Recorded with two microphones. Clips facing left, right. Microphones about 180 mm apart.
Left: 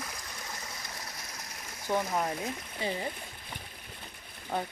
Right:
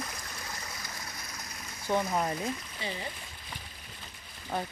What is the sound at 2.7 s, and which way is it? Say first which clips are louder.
Speech: left 4 dB; 50° left (ahead or behind).